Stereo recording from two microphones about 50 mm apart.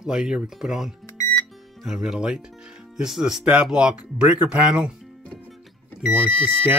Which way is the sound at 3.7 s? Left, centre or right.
Centre.